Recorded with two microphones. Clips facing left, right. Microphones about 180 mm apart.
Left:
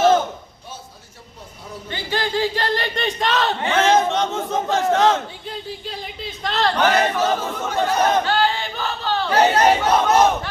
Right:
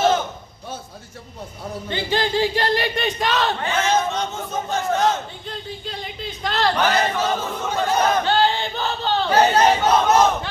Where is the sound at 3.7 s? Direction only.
90° left.